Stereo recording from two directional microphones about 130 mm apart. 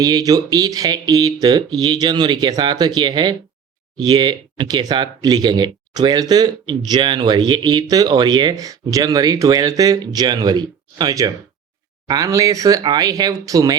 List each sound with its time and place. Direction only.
0.0 s speech: 30° right (ahead or behind)